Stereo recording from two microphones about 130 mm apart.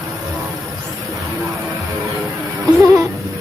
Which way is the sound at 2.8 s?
25° right (ahead or behind).